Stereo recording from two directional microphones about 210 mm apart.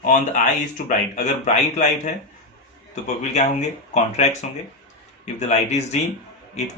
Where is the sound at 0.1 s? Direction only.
40° left (ahead or behind).